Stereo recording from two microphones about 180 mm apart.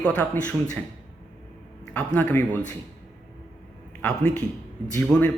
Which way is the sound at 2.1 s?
10° left (ahead or behind).